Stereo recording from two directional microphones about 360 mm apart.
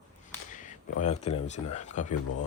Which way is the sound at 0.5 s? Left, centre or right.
Centre.